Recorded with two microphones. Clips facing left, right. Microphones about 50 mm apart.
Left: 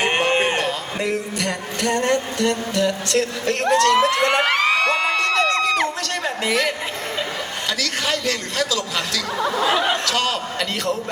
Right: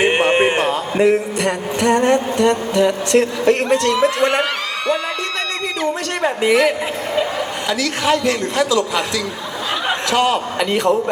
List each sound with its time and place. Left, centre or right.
0.0 s a man's voice: centre
4.4 s crowd: left
6.2 s a man's voice: right